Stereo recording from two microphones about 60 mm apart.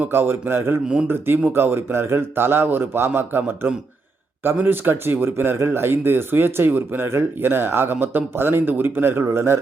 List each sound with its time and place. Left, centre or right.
0.0 s speech: right